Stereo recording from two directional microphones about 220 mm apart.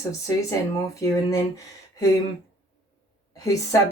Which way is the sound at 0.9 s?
15° left (ahead or behind).